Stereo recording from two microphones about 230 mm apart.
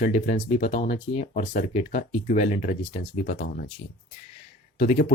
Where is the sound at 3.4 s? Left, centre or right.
Left.